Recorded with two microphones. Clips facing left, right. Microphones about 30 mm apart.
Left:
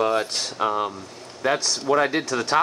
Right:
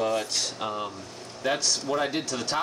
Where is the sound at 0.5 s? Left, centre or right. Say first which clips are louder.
Left 8 dB; left.